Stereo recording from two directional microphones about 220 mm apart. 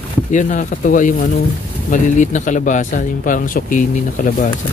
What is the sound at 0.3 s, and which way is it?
A man's voice, 35° left (ahead or behind).